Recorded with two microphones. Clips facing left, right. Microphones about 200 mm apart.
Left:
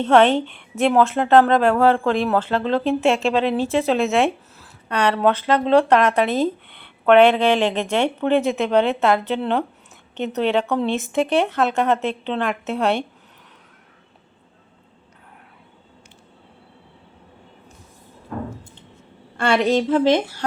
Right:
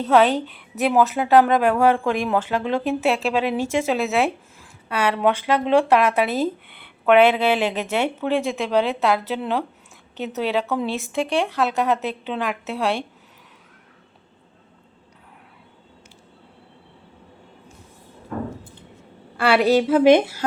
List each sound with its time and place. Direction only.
0.0 s a woman's voice: centre (ahead or behind)
19.4 s a woman's voice: 5° right (ahead or behind)